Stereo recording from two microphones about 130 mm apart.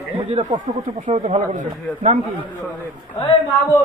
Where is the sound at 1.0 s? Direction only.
60° right (ahead or behind).